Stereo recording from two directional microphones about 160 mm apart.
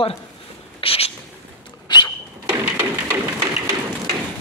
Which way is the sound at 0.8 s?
35° left (ahead or behind).